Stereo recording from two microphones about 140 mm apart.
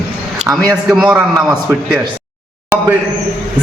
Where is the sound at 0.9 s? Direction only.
5° right (ahead or behind).